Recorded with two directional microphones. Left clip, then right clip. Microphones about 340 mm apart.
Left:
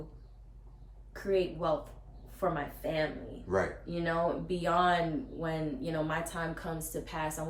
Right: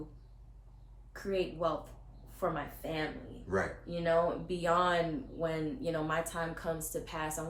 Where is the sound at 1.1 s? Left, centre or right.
Centre.